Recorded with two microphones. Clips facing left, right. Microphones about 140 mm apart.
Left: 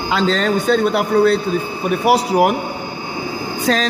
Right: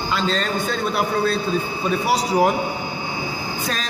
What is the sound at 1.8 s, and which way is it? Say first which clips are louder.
Speech: left 6 dB; 65° left (ahead or behind).